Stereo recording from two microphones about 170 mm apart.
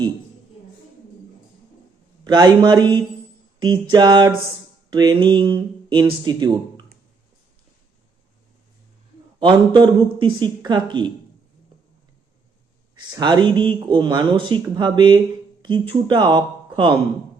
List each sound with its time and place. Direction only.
2.2 s speech: 25° right (ahead or behind)
9.4 s speech: 25° right (ahead or behind)
13.0 s speech: 25° right (ahead or behind)